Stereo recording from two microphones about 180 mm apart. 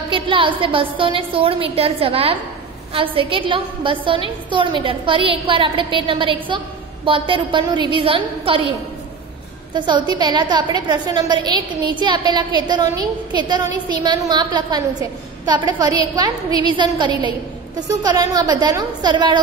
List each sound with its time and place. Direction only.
0.1 s a woman's voice: 30° right (ahead or behind)
9.8 s a woman's voice: 25° right (ahead or behind)